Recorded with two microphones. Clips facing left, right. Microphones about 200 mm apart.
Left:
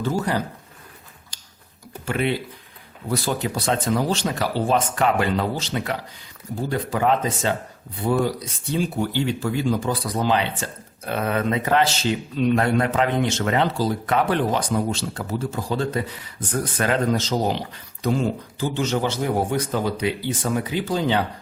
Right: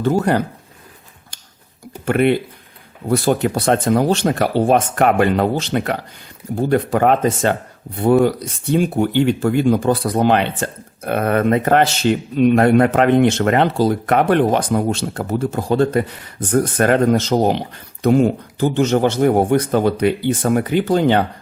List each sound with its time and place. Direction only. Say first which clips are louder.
0.0 s speech: right 7 dB; 60° right (ahead or behind)
1.3 s a sound: right 4 dB; 55° right (ahead or behind)
2.0 s speech: right 8 dB; 60° right (ahead or behind)